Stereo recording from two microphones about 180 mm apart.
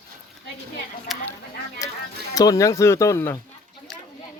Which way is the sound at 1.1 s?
Centre (ahead or behind).